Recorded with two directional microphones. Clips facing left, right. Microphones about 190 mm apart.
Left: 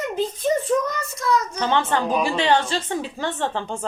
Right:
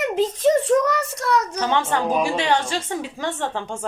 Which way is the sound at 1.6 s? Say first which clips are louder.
Even; 10° right (ahead or behind).